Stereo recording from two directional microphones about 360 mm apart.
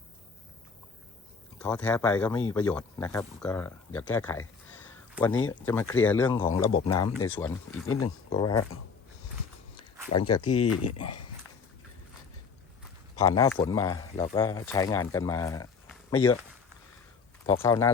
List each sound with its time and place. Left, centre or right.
1.5 s speech: centre
5.3 s speech: left
5.6 s speech: centre
7.1 s speech: left
7.3 s speech: centre
7.9 s speech: left
8.3 s speech: centre
10.2 s speech: centre
10.5 s speech: left
13.1 s speech: centre
17.4 s speech: centre